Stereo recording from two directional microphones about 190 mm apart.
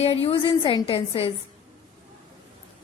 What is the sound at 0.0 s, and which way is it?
A woman's voice, 30° left (ahead or behind).